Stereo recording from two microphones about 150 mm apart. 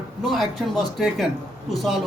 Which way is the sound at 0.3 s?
Centre (ahead or behind).